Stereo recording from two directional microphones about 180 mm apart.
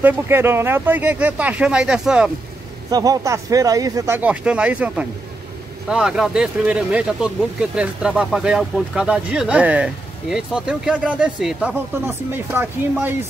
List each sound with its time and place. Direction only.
0.0 s speech: 10° right (ahead or behind)
2.9 s speech: 20° right (ahead or behind)